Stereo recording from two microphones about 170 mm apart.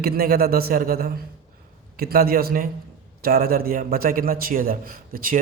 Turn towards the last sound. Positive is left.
turn(degrees=-55)  # may be behind; listen again after turning